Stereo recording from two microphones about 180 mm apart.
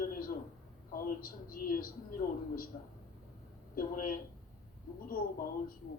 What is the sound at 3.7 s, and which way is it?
Speech, 50° left (ahead or behind).